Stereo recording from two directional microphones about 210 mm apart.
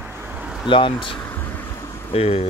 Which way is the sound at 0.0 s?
10° right (ahead or behind).